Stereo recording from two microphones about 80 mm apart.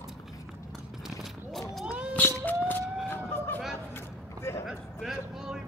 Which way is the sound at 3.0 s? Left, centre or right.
Left.